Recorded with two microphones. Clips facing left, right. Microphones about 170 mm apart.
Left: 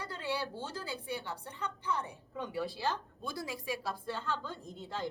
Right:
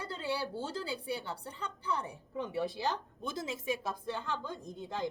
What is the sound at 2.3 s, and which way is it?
A woman's voice, 25° right (ahead or behind).